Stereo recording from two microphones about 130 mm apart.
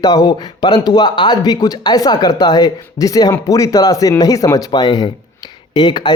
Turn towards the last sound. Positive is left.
turn(degrees=35)  # may be behind; listen again after turning